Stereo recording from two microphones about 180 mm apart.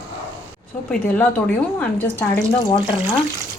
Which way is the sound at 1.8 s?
10° left (ahead or behind).